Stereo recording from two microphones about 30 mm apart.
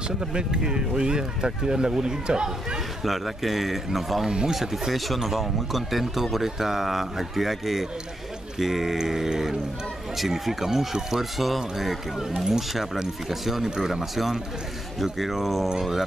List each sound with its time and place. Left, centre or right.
0.3 s speech: right
3.0 s speech: centre
4.9 s speech: centre
15.0 s speech: centre